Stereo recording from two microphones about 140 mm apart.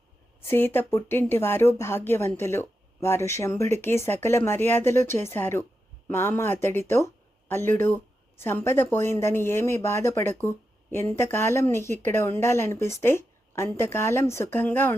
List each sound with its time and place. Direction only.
0.4 s a woman's voice: 15° left (ahead or behind)